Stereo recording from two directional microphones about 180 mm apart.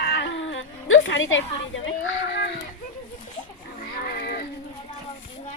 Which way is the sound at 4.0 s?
55° left (ahead or behind).